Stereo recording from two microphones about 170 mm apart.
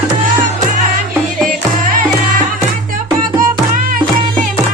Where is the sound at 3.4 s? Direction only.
55° right (ahead or behind).